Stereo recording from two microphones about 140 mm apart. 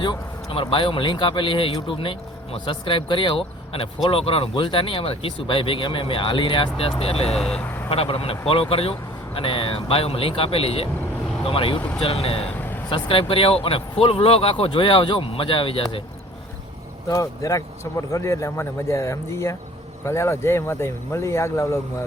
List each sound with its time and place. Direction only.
0.0 s a man's voice: 35° left (ahead or behind)
7.3 s speech: 5° left (ahead or behind)
7.9 s a man's voice: 45° left (ahead or behind)
11.8 s speech: 10° left (ahead or behind)
12.0 s speech: 45° left (ahead or behind)
12.5 s vehicle: 15° left (ahead or behind)
12.9 s a man's voice: 40° left (ahead or behind)
17.1 s speech: 25° left (ahead or behind)